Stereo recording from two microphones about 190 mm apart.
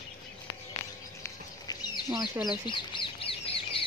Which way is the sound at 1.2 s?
20° left (ahead or behind).